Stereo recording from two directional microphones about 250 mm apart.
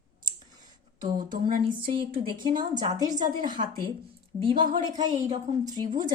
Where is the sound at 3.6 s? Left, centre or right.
Right.